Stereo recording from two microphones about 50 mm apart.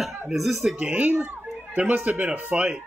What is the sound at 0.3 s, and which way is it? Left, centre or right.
Speech, centre.